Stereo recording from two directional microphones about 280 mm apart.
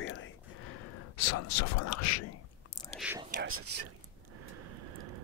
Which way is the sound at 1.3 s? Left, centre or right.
Left.